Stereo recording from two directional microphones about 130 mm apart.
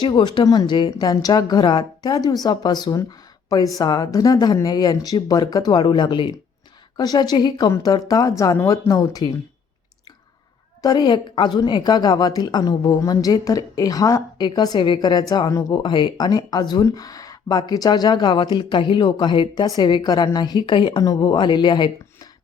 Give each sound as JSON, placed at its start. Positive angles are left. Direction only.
{"t": 0.0, "sound": "a woman's voice", "side_deg": 35}
{"t": 10.8, "sound": "a woman's voice", "side_deg": 35}